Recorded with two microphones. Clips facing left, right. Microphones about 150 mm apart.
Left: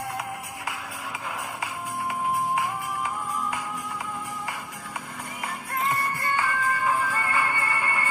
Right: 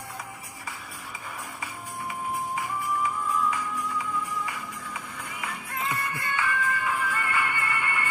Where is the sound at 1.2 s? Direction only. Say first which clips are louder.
Left 4 dB; 80° left.